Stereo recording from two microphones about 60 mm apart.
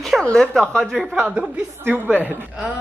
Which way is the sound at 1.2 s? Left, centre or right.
Centre.